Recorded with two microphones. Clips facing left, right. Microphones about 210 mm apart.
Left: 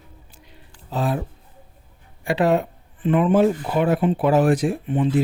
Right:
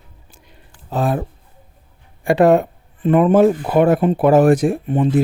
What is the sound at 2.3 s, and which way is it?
Speech, 50° right (ahead or behind).